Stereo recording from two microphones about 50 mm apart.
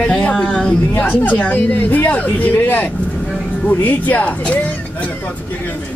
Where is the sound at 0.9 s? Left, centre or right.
Left.